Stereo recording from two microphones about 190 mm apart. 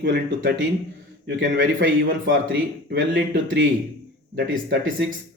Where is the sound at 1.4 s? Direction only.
75° right (ahead or behind).